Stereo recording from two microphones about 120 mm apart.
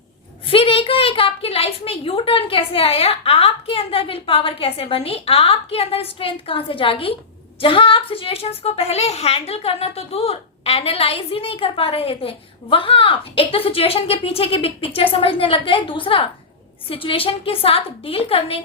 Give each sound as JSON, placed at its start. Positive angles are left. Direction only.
{"t": 0.4, "sound": "a woman's voice", "side_deg": 50}